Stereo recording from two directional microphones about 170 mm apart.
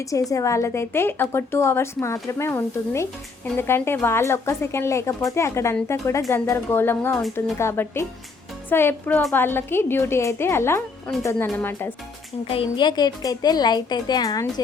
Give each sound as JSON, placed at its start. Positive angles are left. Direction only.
{"t": 0.0, "sound": "a woman's voice", "side_deg": 20}
{"t": 12.5, "sound": "a woman's voice", "side_deg": 30}